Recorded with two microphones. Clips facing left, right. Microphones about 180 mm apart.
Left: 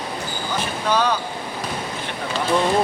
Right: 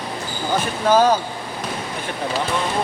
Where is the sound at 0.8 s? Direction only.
45° right (ahead or behind).